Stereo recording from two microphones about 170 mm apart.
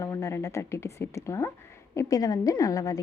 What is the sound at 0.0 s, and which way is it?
A woman's voice, 20° left (ahead or behind).